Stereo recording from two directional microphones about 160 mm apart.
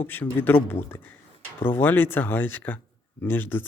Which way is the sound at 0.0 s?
15° left (ahead or behind).